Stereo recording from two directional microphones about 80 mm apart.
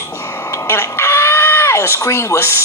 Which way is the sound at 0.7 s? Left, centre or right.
Left.